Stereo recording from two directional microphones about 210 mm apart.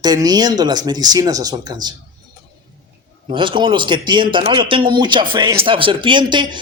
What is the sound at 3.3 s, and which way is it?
A man's voice, 25° right (ahead or behind).